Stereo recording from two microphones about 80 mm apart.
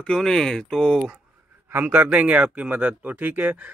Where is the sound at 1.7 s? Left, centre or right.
Right.